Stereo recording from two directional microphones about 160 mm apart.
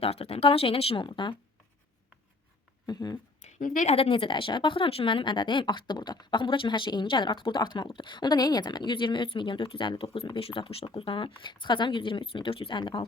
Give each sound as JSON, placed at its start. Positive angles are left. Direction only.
{"t": 0.0, "sound": "speech", "side_deg": 40}
{"t": 2.8, "sound": "speech", "side_deg": 25}
{"t": 3.4, "sound": "a sound", "side_deg": 50}
{"t": 3.9, "sound": "speech", "side_deg": 35}